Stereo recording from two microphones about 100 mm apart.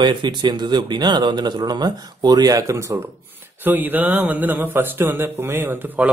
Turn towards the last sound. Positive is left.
turn(degrees=-20)  # may be behind; listen again after turning